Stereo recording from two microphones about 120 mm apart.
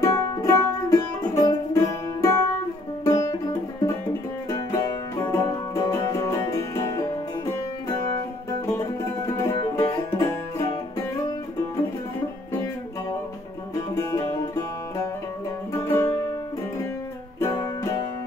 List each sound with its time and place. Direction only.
0.0 s music: 30° left (ahead or behind)
4.5 s music: 30° left (ahead or behind)
13.7 s music: 25° left (ahead or behind)